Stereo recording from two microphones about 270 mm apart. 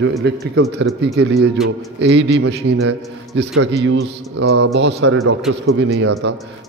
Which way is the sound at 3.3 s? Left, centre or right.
Right.